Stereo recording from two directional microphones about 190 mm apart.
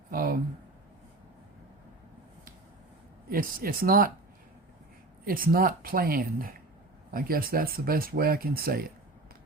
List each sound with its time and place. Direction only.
0.1 s a sound: 50° right (ahead or behind)
3.2 s speech: 50° right (ahead or behind)
5.2 s speech: 50° right (ahead or behind)